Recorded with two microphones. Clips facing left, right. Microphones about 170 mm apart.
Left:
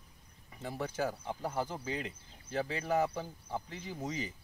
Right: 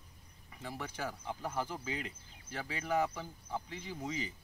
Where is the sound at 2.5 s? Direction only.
30° left (ahead or behind).